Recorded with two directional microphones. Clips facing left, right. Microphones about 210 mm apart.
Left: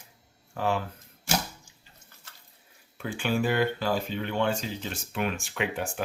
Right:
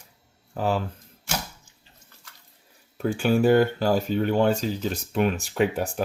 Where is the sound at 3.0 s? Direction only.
40° right (ahead or behind).